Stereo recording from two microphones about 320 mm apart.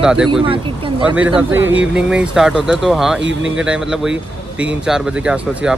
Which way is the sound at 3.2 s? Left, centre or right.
Right.